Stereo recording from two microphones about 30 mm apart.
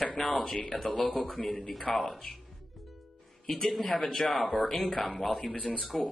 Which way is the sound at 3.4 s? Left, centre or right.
Centre.